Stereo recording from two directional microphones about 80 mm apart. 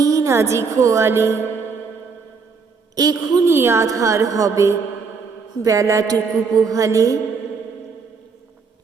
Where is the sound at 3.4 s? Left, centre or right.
Right.